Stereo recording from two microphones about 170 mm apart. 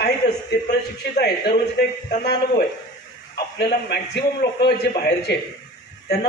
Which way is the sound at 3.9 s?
80° left.